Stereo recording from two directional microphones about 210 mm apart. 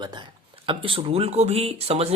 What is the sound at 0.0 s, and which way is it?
Speech, 20° right (ahead or behind).